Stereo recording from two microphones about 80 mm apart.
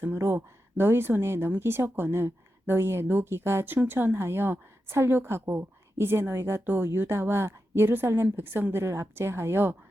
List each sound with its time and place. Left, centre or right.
0.0 s speech: right